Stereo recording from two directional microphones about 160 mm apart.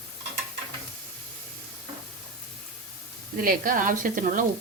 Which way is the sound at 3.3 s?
60° right (ahead or behind).